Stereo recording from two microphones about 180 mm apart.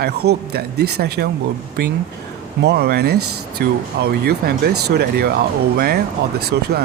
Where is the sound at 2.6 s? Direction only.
65° right (ahead or behind).